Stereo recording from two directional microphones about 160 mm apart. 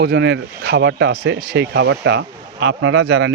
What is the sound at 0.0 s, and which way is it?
Speech, 85° right.